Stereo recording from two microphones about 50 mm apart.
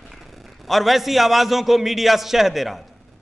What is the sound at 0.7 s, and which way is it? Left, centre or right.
A man's voice, centre.